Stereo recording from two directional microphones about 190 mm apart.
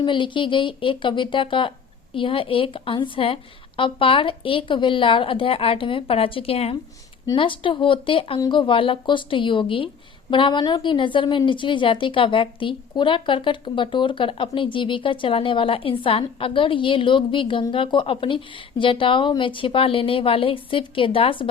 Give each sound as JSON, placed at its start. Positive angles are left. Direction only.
{"t": 0.0, "sound": "speech", "side_deg": 25}